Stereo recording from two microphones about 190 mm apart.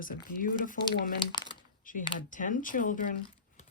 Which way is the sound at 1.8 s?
45° left (ahead or behind).